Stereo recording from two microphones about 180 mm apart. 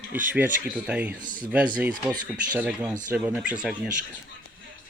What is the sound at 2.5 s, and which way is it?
Speech, 5° right (ahead or behind).